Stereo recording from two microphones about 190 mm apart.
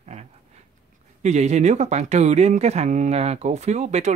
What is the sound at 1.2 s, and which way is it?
Speech, 35° right (ahead or behind).